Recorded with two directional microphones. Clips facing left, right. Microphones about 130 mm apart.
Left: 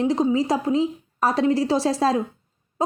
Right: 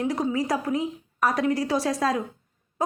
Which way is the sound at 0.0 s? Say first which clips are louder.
Left 5 dB; 25° left (ahead or behind).